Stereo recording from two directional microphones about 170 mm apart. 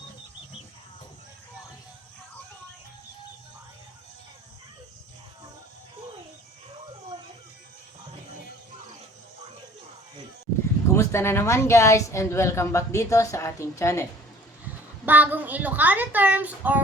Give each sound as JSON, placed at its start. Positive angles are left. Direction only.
{"t": 10.9, "sound": "a woman's voice", "side_deg": 15}
{"t": 15.0, "sound": "a woman's voice", "side_deg": -10}